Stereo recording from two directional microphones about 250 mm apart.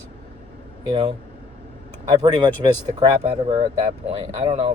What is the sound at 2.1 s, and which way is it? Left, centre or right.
A man's voice, centre.